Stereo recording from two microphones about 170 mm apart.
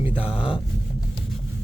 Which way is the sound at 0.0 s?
10° right (ahead or behind).